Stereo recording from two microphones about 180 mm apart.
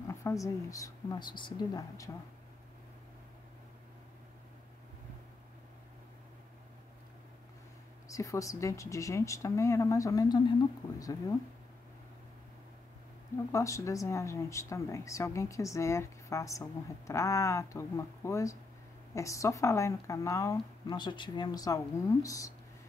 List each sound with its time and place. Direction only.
0.1 s speech: 15° left (ahead or behind)
8.1 s speech: 20° left (ahead or behind)
13.5 s speech: 15° left (ahead or behind)